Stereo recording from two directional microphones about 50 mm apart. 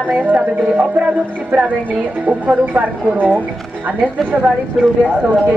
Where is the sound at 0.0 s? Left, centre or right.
Right.